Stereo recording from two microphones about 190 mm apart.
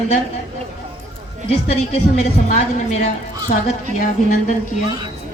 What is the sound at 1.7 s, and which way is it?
Speech, 35° left (ahead or behind).